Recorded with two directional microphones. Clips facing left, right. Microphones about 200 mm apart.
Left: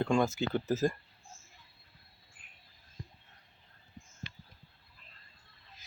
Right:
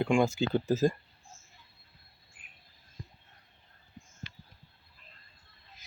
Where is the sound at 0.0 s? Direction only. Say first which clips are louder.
Right 2 dB; 10° right (ahead or behind).